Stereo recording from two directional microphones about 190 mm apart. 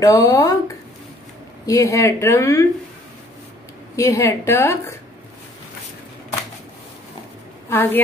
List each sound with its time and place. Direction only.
0.0 s a woman's voice: 15° left (ahead or behind)
1.7 s a woman's voice: 15° left (ahead or behind)
3.9 s a woman's voice: 15° left (ahead or behind)
7.7 s a woman's voice: 10° left (ahead or behind)